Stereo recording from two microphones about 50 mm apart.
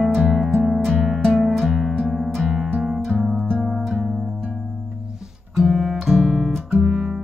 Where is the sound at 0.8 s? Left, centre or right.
Centre.